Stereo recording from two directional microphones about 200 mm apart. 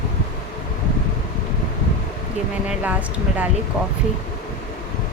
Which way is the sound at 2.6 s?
10° right (ahead or behind).